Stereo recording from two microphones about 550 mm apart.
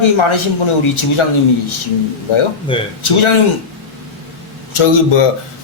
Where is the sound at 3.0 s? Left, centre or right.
Left.